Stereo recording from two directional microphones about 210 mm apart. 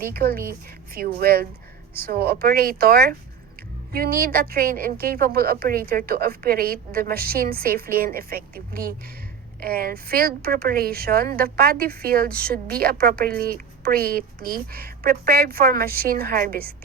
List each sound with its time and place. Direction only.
0.0 s a woman's voice: 45° right (ahead or behind)